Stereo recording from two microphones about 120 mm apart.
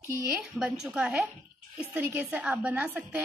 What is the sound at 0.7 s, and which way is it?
A woman's voice, 10° right (ahead or behind).